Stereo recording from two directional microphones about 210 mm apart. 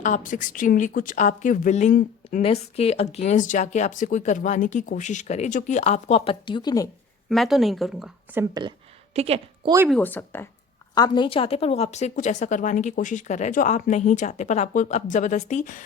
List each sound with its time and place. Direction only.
0.0 s a woman's voice: 40° left (ahead or behind)
2.4 s a woman's voice: 30° left (ahead or behind)
7.3 s a woman's voice: centre (ahead or behind)
9.1 s a woman's voice: 30° right (ahead or behind)
9.9 s a woman's voice: 10° left (ahead or behind); by 15.8 s 35° left (ahead or behind)